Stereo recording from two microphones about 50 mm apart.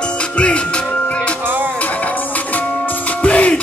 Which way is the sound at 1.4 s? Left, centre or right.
Right.